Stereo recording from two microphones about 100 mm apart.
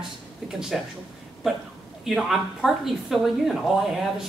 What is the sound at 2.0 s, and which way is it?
Speech, centre (ahead or behind).